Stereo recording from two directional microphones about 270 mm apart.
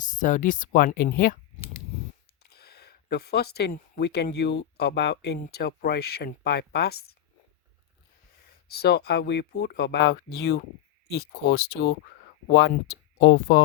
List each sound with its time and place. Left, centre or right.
0.0 s speech: left
2.4 s speech: left
8.4 s speech: left